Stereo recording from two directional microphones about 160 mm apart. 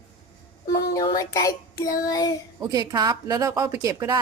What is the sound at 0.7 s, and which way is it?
A child's voice, 25° left (ahead or behind).